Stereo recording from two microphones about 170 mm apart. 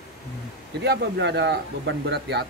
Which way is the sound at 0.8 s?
75° right (ahead or behind).